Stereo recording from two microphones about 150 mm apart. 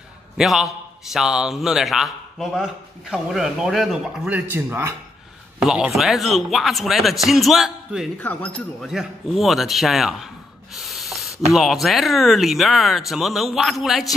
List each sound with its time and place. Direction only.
0.4 s a man's voice: centre (ahead or behind)
4.5 s speech: 15° right (ahead or behind)
5.6 s a man's voice: 5° right (ahead or behind)
8.2 s speech: 10° left (ahead or behind)
8.8 s a man's voice: centre (ahead or behind)